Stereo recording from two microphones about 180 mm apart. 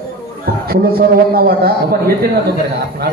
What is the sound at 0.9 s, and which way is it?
Chant, 60° right (ahead or behind).